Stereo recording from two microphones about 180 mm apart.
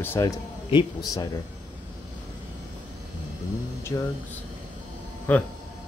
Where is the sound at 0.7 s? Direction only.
25° left (ahead or behind).